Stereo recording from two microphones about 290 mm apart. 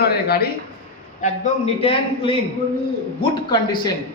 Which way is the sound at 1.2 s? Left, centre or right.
Left.